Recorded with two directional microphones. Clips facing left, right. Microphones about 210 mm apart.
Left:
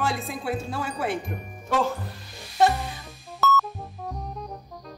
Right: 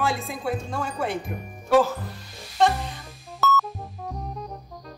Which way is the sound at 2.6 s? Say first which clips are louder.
Even; centre (ahead or behind).